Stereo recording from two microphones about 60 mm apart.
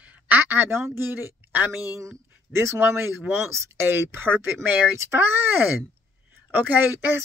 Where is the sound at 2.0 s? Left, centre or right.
Right.